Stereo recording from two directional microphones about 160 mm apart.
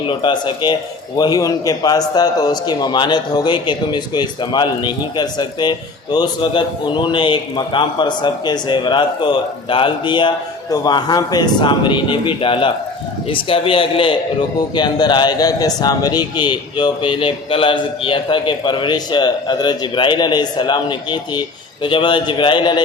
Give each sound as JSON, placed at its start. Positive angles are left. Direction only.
{"t": 0.1, "sound": "a man's voice", "side_deg": 30}